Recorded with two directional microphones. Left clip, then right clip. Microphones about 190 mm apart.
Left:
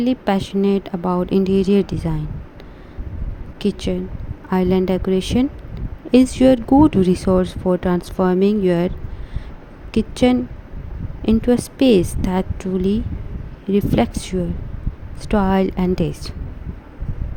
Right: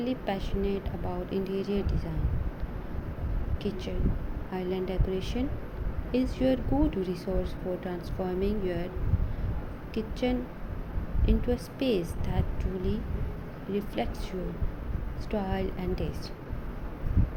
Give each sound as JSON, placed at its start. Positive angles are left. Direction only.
{"t": 0.0, "sound": "speech", "side_deg": 50}
{"t": 3.6, "sound": "speech", "side_deg": 50}
{"t": 9.9, "sound": "speech", "side_deg": 50}